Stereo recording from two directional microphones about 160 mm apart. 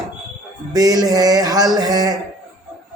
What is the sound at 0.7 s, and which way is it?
A man's voice, 25° right (ahead or behind).